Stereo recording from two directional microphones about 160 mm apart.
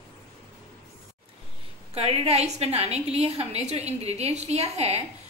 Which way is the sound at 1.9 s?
40° right (ahead or behind).